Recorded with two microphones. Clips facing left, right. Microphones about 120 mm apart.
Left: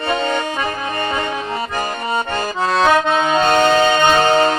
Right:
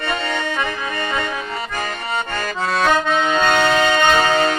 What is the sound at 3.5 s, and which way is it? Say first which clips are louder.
Music: left 4 dB; 35° left (ahead or behind).